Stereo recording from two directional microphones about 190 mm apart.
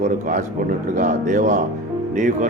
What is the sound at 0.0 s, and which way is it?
Speech, 45° right (ahead or behind).